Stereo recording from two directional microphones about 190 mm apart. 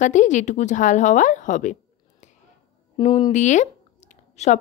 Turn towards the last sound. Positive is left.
turn(degrees=35)  # may be behind; listen again after turning